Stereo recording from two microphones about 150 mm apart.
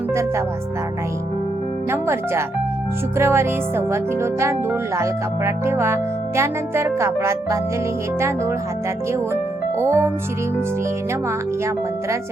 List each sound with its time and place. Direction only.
0.1 s speech: 20° right (ahead or behind)
1.9 s speech: 15° right (ahead or behind)
9.8 s speech: 15° right (ahead or behind)